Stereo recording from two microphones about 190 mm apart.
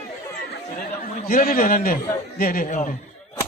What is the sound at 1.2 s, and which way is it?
A man's voice, 50° left (ahead or behind).